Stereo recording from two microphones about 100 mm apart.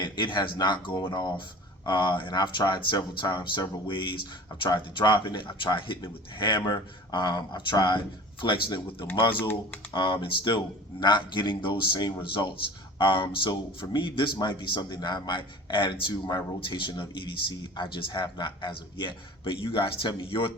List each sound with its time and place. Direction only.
0.0 s speech: 50° left (ahead or behind)
12.2 s speech: 55° left (ahead or behind)